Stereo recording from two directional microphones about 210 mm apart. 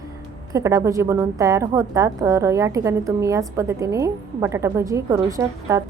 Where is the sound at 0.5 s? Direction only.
15° right (ahead or behind).